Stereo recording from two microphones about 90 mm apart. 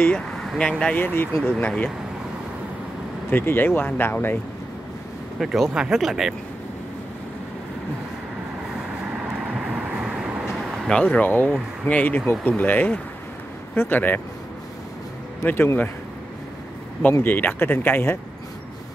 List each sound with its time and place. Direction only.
0.3 s speech: 5° left (ahead or behind)
1.0 s speech: 25° left (ahead or behind)
3.3 s speech: 20° left (ahead or behind)
5.4 s speech: centre (ahead or behind)
9.0 s vehicle: 15° right (ahead or behind)
10.9 s speech: 10° left (ahead or behind)
15.4 s speech: 25° left (ahead or behind)
17.2 s speech: 20° left (ahead or behind)